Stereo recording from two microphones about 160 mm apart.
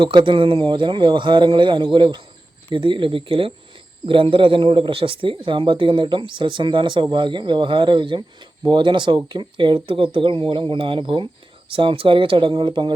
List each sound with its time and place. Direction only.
0.0 s speech: 30° right (ahead or behind)